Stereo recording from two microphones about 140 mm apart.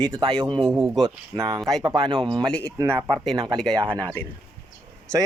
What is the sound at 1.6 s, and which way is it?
Speech, 5° left (ahead or behind).